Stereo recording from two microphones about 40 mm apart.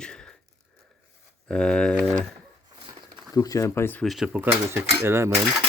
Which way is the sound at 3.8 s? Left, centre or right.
Left.